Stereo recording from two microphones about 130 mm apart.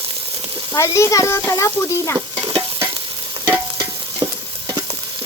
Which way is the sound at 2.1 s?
35° right (ahead or behind).